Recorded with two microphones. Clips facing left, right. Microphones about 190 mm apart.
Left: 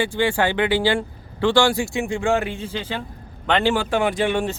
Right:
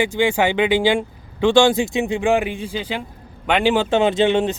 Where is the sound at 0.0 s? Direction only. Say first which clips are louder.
Right 2 dB; 15° right (ahead or behind).